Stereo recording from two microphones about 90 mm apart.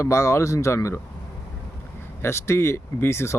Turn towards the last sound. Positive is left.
turn(degrees=30)  # may be behind; listen again after turning